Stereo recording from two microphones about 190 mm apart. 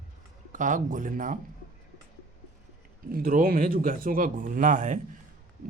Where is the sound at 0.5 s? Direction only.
45° right (ahead or behind).